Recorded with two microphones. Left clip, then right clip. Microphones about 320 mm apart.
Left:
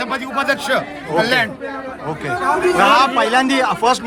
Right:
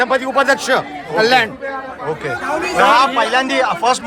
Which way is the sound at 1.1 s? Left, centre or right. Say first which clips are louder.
Right 3 dB; centre.